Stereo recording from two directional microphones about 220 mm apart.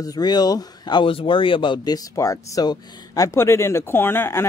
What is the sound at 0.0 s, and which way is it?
Speech, 15° left (ahead or behind).